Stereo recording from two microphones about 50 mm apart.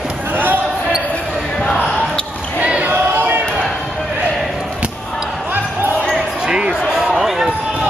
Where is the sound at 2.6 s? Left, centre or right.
Right.